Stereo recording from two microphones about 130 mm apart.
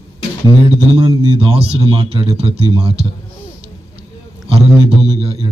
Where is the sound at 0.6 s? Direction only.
35° right (ahead or behind).